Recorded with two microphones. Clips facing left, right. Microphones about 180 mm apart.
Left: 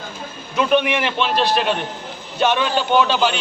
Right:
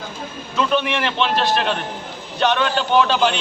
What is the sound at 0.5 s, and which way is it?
A man's voice, 10° left (ahead or behind).